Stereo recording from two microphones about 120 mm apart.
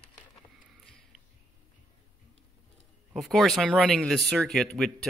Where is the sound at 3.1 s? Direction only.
Centre (ahead or behind).